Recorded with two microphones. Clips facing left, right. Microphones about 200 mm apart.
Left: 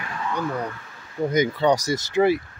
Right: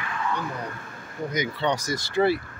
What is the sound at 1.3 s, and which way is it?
Speech, 45° left (ahead or behind).